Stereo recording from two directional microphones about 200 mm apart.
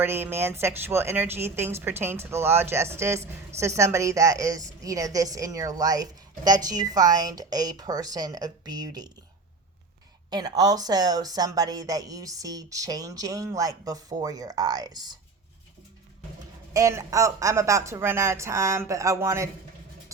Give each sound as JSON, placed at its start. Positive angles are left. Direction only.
{"t": 0.0, "sound": "speech", "side_deg": -10}
{"t": 10.2, "sound": "speech", "side_deg": -20}
{"t": 16.7, "sound": "speech", "side_deg": -15}